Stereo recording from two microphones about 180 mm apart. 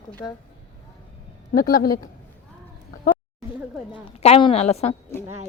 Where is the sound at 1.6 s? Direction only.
55° left (ahead or behind).